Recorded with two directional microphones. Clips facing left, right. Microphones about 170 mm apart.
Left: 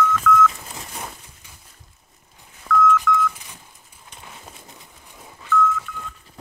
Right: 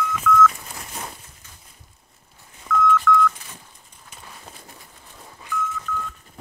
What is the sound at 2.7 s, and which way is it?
Telephone dialing, centre (ahead or behind).